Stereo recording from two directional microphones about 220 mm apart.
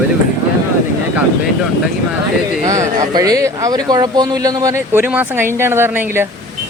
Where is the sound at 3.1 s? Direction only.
15° right (ahead or behind).